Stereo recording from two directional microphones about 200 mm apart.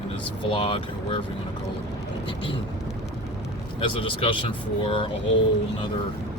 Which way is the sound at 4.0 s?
25° left (ahead or behind).